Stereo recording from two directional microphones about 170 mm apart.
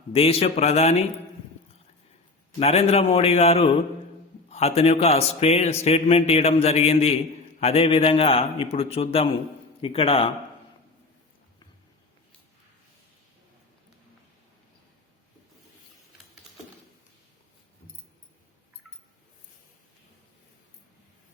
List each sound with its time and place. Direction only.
0.1 s a man's voice: 35° left (ahead or behind)
2.6 s a man's voice: 35° left (ahead or behind)